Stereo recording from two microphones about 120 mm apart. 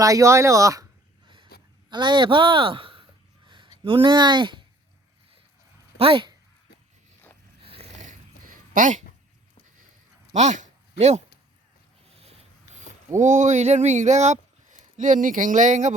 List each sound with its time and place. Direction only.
0.0 s speech: 30° right (ahead or behind)
1.9 s a sound: 40° right (ahead or behind)
3.8 s speech: 45° right (ahead or behind)
6.0 s speech: 45° right (ahead or behind)
7.6 s a sound: 50° right (ahead or behind)
10.3 s speech: 75° right (ahead or behind)
13.1 s speech: 90° right